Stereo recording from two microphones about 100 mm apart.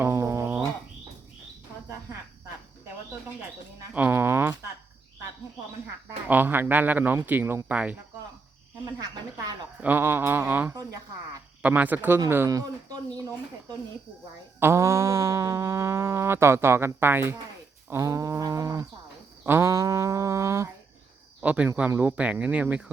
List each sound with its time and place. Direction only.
0.0 s bird: 25° right (ahead or behind)
3.9 s speech: 20° right (ahead or behind)
6.2 s speech: 20° right (ahead or behind)
7.3 s mantra: 20° right (ahead or behind)
9.0 s speech: 40° right (ahead or behind)
9.8 s mantra: 20° right (ahead or behind)
11.6 s speech: 15° right (ahead or behind)
12.5 s speech: 35° right (ahead or behind)
14.6 s mantra: 25° right (ahead or behind)
17.8 s speech: 25° right (ahead or behind)
19.5 s mantra: 20° right (ahead or behind)
19.7 s speech: 35° right (ahead or behind)
21.4 s speech: 10° right (ahead or behind)